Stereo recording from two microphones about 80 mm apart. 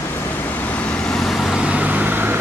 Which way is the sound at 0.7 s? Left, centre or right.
Centre.